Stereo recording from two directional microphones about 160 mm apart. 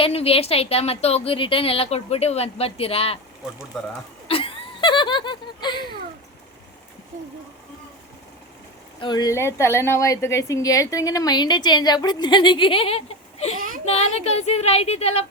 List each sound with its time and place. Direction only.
0.0 s a woman's voice: 40° left (ahead or behind)
3.7 s speech: centre (ahead or behind)
4.3 s laughter: 35° left (ahead or behind)
9.0 s a woman's voice: 25° left (ahead or behind)